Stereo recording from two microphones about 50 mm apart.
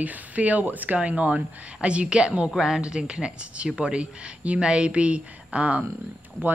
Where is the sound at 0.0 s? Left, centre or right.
Right.